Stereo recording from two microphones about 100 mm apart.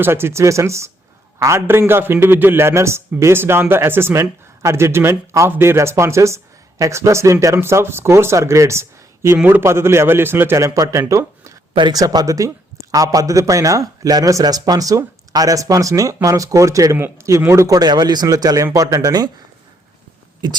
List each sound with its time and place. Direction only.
0.0 s a man's voice: 25° right (ahead or behind)
11.1 s a sound: 30° right (ahead or behind)
11.8 s a man's voice: 40° right (ahead or behind)